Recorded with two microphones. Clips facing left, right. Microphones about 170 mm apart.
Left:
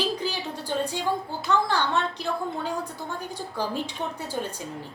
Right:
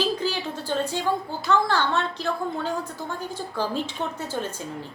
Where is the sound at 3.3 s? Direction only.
15° left (ahead or behind).